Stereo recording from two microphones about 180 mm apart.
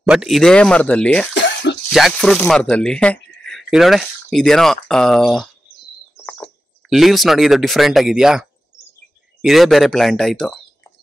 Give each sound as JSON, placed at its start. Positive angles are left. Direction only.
{"t": 0.0, "sound": "speech", "side_deg": -5}
{"t": 1.3, "sound": "cough", "side_deg": 80}
{"t": 1.9, "sound": "speech", "side_deg": 0}